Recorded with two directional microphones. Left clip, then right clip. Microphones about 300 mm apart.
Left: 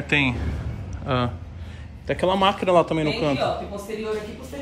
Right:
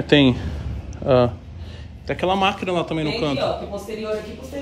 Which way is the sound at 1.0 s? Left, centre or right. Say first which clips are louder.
Right 9 dB; right.